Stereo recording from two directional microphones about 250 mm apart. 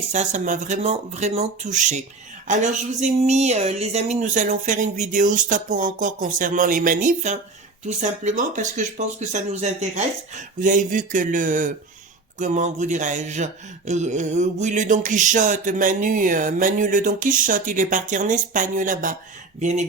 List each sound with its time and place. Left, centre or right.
0.1 s speech: right